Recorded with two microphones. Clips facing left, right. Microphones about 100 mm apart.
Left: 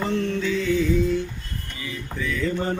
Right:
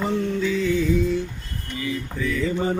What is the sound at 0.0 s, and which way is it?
Mantra, 10° right (ahead or behind).